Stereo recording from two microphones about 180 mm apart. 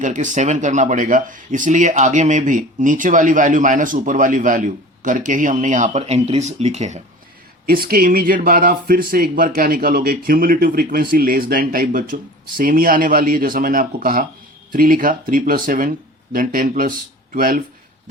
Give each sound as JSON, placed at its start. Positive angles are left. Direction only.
{"t": 0.0, "sound": "speech", "side_deg": -45}
{"t": 7.7, "sound": "speech", "side_deg": -55}